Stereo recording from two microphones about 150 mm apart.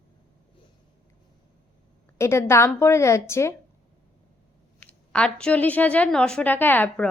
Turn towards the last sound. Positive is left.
turn(degrees=10)  # may be behind; listen again after turning